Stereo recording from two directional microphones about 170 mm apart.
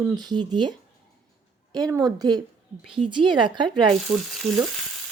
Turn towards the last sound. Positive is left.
turn(degrees=-40)  # may be behind; listen again after turning